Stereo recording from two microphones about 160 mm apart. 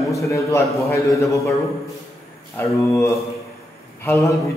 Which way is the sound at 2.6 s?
15° left (ahead or behind).